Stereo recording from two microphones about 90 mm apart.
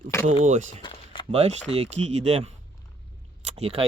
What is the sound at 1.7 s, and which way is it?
Speech, 90° right.